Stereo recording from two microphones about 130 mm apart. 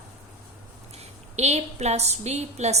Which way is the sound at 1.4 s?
60° right (ahead or behind).